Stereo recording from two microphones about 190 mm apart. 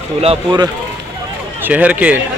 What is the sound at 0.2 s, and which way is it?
Speech, 30° right (ahead or behind).